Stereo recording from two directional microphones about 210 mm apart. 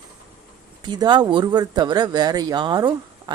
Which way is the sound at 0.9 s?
20° right (ahead or behind).